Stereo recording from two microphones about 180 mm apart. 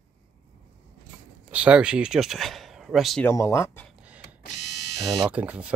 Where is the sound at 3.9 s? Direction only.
5° right (ahead or behind).